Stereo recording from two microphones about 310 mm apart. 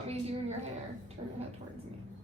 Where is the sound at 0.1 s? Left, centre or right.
Centre.